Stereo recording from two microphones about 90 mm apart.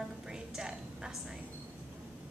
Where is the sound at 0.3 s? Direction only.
5° right (ahead or behind).